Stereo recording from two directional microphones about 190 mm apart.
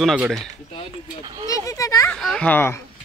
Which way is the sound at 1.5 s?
15° left (ahead or behind).